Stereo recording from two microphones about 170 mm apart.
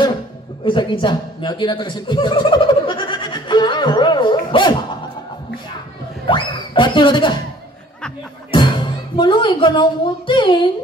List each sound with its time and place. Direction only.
0.7 s speech: 30° left (ahead or behind)
6.2 s a sound: 30° left (ahead or behind)
8.5 s music: 30° left (ahead or behind)